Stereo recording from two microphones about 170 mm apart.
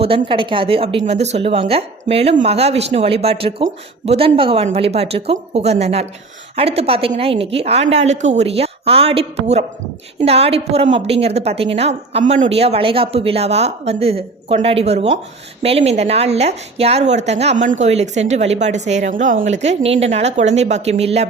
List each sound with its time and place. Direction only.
0.3 s speech: 30° right (ahead or behind)